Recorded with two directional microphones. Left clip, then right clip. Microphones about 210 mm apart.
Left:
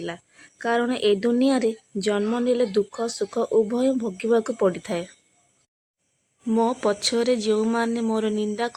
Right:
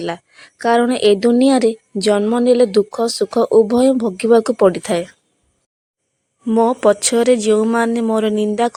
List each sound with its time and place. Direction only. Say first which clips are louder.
0.0 s a woman's voice: right 9 dB; 30° right (ahead or behind)
6.5 s speech: right 9 dB; 25° right (ahead or behind)